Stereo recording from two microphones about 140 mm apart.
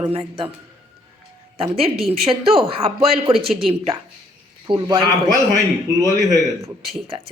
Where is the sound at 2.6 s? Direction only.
40° right (ahead or behind).